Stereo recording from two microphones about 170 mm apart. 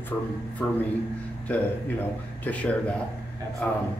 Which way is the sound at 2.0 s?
10° left (ahead or behind).